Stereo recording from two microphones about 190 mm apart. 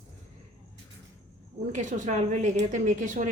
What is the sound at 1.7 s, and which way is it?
Speech, 40° right (ahead or behind).